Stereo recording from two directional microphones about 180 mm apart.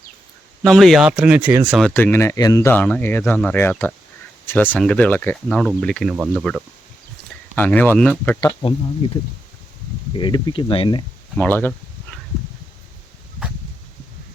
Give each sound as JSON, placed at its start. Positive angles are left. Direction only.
{"t": 0.6, "sound": "speech", "side_deg": 0}
{"t": 1.9, "sound": "speech", "side_deg": 10}
{"t": 6.1, "sound": "speech", "side_deg": -10}
{"t": 7.5, "sound": "speech", "side_deg": 10}
{"t": 9.0, "sound": "speech", "side_deg": 30}
{"t": 11.3, "sound": "speech", "side_deg": 10}